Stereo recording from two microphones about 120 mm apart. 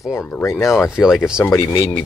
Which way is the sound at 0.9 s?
5° right (ahead or behind).